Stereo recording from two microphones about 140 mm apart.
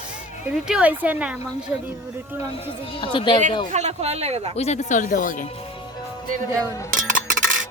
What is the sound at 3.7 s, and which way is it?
Speech, 55° right (ahead or behind).